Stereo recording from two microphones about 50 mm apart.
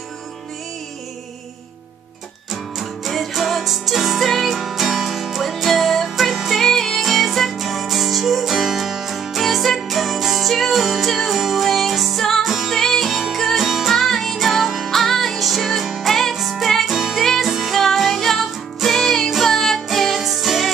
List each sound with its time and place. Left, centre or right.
2.5 s music: centre
13.9 s music: centre
14.9 s music: centre